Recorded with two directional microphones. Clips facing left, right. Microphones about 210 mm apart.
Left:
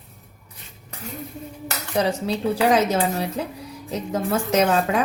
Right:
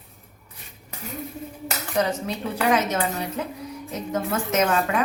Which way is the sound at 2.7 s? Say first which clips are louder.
Left 3 dB; 30° left (ahead or behind).